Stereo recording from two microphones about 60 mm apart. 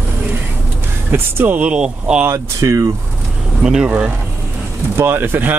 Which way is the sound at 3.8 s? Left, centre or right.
Right.